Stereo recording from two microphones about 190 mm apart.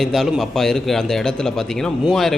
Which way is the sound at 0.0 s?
Centre (ahead or behind).